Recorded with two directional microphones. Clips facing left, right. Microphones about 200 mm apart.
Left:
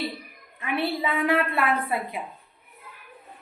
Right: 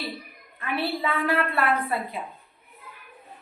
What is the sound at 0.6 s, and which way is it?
A woman's voice, 20° left (ahead or behind).